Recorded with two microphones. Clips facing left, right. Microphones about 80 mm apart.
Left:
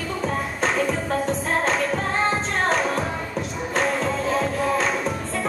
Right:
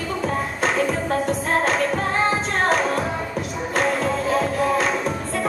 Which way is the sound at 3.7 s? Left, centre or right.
Centre.